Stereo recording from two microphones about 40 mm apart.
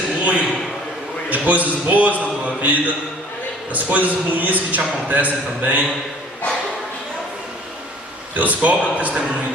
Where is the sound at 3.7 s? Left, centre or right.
Right.